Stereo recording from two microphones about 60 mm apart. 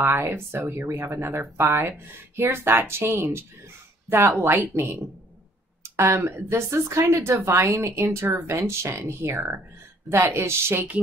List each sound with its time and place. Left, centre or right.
0.1 s speech: right
0.8 s speech: right
5.8 s speech: right